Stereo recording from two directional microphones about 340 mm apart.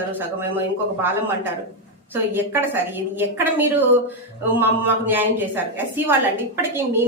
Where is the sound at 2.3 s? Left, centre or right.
Centre.